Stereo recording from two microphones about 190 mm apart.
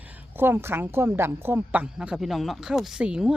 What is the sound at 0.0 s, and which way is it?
A woman's voice, 10° right (ahead or behind).